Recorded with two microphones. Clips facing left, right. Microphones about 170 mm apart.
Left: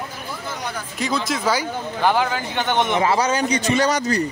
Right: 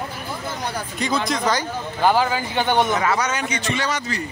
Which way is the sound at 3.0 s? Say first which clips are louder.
Left 3 dB; 30° left (ahead or behind).